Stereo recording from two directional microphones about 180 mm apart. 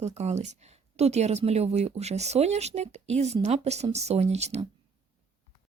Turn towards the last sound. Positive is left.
turn(degrees=-35)  # may be behind; listen again after turning